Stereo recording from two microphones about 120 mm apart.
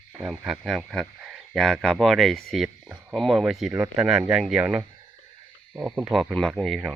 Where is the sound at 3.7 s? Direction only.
15° right (ahead or behind).